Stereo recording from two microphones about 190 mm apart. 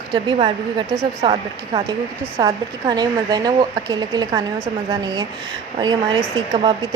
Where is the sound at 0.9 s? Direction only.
20° right (ahead or behind).